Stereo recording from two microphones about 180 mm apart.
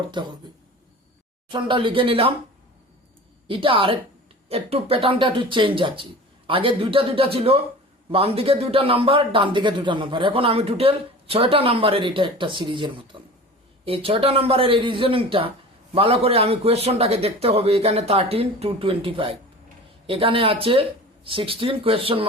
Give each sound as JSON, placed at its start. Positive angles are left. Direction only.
{"t": 0.2, "sound": "speech", "side_deg": -25}
{"t": 1.5, "sound": "speech", "side_deg": -25}
{"t": 3.4, "sound": "a man's voice", "side_deg": -30}